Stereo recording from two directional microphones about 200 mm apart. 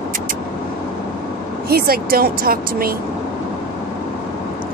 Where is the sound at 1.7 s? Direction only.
50° right (ahead or behind).